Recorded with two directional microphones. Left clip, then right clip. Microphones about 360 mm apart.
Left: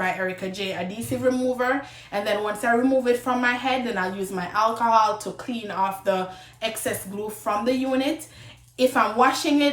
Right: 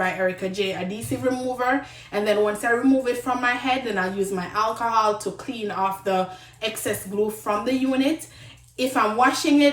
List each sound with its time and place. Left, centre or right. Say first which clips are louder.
0.0 s a woman's voice: right 2 dB; centre